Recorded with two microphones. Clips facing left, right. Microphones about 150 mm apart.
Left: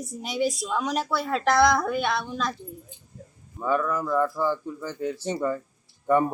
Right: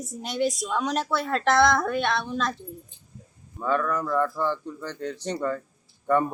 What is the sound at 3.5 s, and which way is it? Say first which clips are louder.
Speech: even; 10° left (ahead or behind).